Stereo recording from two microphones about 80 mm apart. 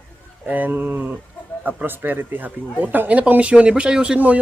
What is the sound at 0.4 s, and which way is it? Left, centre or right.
Speech, centre.